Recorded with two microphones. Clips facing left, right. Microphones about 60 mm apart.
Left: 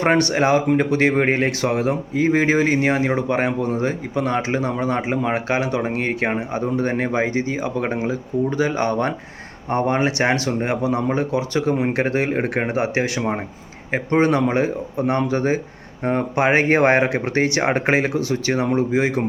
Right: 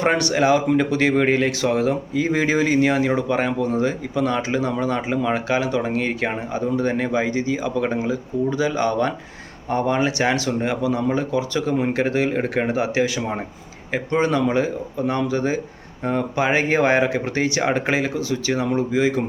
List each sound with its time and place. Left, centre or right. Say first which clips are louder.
0.0 s speech: left 1 dB; left